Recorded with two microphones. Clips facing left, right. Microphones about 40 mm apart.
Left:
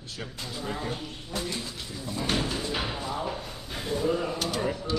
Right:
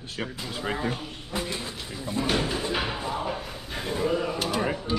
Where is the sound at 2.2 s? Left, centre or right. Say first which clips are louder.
Right 2 dB; centre.